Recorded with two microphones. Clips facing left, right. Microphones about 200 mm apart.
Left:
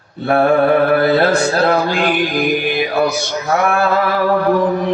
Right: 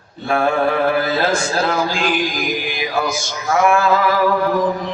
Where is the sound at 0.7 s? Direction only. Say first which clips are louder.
Left 5 dB; 60° left (ahead or behind).